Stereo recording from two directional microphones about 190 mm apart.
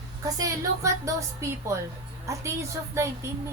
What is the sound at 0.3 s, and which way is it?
A woman's voice, 15° right (ahead or behind).